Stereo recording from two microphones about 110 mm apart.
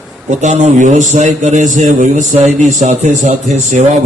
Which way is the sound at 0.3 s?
90° right.